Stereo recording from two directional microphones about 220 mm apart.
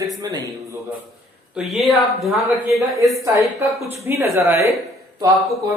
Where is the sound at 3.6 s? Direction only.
15° right (ahead or behind).